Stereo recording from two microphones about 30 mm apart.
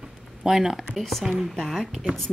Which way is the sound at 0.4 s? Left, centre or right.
Centre.